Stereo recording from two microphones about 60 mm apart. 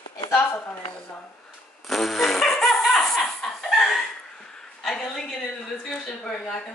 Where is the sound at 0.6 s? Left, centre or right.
Left.